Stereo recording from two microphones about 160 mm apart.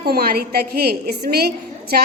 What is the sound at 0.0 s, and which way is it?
A woman's voice, 75° right (ahead or behind).